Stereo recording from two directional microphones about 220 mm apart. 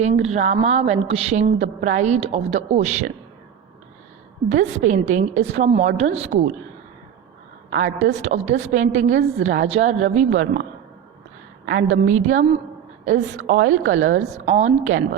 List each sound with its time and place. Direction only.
0.0 s a woman's voice: 30° right (ahead or behind)
4.4 s a woman's voice: 30° right (ahead or behind)
7.8 s a woman's voice: 55° right (ahead or behind)
8.1 s a woman's voice: 30° right (ahead or behind)
11.6 s a woman's voice: 60° right (ahead or behind)
11.9 s a woman's voice: 35° right (ahead or behind)
13.6 s a woman's voice: 60° right (ahead or behind)
13.9 s a woman's voice: 35° right (ahead or behind)